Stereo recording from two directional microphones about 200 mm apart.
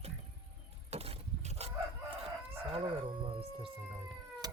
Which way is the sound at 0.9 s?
30° right (ahead or behind).